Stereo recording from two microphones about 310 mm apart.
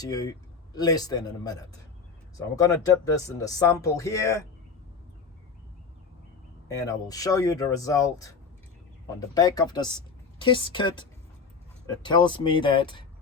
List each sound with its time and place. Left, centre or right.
0.0 s speech: centre
2.6 s speech: centre
6.7 s speech: centre
12.0 s speech: centre